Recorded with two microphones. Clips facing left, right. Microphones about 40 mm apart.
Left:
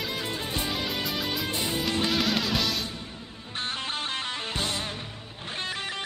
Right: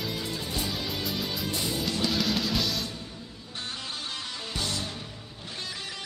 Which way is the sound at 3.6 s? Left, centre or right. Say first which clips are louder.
Left 5 dB; left.